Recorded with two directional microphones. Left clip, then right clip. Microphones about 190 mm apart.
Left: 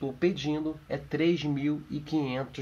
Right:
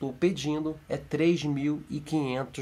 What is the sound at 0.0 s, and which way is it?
Speech, 20° right (ahead or behind).